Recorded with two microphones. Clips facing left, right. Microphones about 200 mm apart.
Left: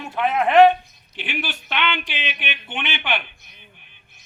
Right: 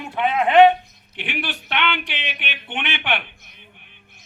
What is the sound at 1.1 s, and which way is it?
A man's voice, 60° right (ahead or behind).